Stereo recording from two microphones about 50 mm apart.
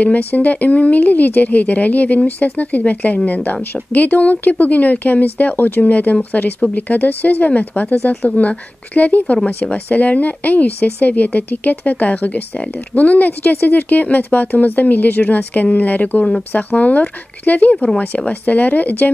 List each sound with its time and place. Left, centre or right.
0.0 s speech: left